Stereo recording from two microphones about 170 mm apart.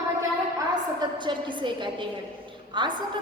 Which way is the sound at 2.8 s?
30° right (ahead or behind).